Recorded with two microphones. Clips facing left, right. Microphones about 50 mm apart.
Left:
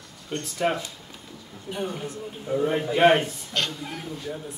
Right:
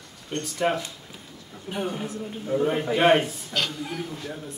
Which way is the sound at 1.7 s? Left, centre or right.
Centre.